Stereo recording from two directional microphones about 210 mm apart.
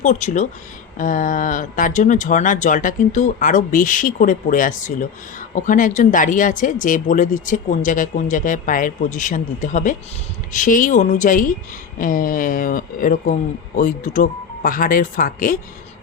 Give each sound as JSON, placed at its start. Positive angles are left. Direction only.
{"t": 0.0, "sound": "speech", "side_deg": 35}